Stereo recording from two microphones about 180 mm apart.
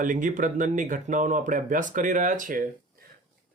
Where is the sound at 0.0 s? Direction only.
50° right (ahead or behind).